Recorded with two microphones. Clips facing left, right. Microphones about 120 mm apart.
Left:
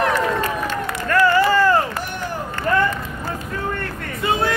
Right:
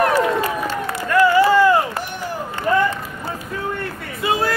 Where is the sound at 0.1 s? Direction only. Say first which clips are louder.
Right 2 dB; 10° right (ahead or behind).